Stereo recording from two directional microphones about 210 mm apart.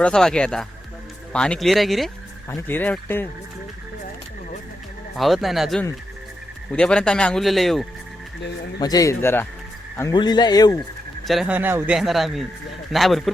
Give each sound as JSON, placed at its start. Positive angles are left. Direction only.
{"t": 0.0, "sound": "speech", "side_deg": 5}
{"t": 2.5, "sound": "speech", "side_deg": 10}
{"t": 5.1, "sound": "speech", "side_deg": 0}
{"t": 8.8, "sound": "speech", "side_deg": 15}
{"t": 11.3, "sound": "speech", "side_deg": -5}